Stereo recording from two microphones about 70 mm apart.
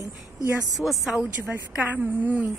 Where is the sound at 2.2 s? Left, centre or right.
Right.